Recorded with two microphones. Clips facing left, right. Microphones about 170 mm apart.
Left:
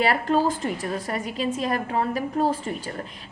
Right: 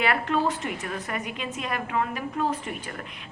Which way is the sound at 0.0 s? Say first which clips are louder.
Left 3 dB; 35° left (ahead or behind).